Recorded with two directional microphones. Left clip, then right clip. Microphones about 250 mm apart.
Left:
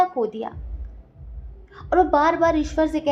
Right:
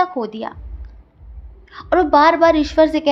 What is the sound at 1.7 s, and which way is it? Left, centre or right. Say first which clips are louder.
A woman's voice: right 4 dB; right.